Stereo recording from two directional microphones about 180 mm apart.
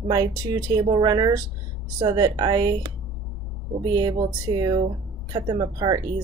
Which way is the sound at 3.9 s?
20° right (ahead or behind).